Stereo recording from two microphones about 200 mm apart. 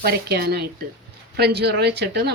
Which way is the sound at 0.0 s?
50° right (ahead or behind).